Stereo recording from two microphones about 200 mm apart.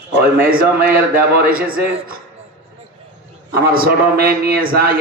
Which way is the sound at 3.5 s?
50° right (ahead or behind).